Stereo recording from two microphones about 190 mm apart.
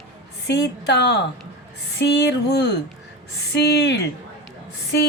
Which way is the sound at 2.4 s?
60° left (ahead or behind).